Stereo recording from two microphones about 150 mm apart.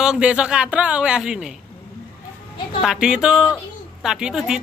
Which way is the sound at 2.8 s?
5° right (ahead or behind).